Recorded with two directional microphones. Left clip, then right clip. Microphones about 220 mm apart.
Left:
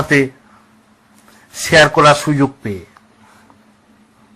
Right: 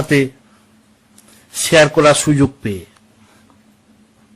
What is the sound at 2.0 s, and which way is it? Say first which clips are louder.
Speech: left 1 dB; 35° right (ahead or behind).